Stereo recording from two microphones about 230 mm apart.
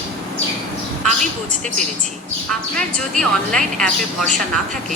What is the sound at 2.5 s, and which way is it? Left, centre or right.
Speech, centre.